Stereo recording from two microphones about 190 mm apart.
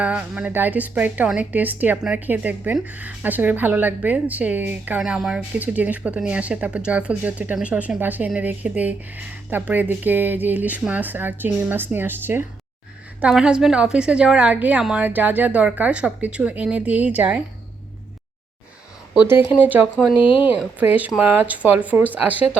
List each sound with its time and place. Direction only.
0.0 s a woman's voice: 5° right (ahead or behind)
19.1 s a woman's voice: 10° right (ahead or behind)
20.1 s speech: 25° left (ahead or behind)
20.6 s a woman's voice: 10° right (ahead or behind)